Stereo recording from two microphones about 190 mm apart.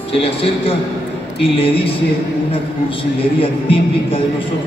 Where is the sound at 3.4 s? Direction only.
30° left (ahead or behind).